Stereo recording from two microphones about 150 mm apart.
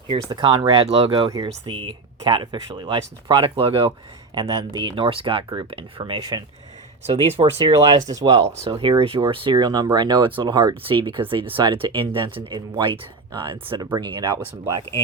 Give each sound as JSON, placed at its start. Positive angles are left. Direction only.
{"t": 0.1, "sound": "speech", "side_deg": -30}
{"t": 4.4, "sound": "speech", "side_deg": -25}